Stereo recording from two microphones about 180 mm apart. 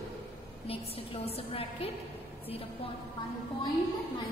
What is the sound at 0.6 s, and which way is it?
A woman's voice, 30° left (ahead or behind).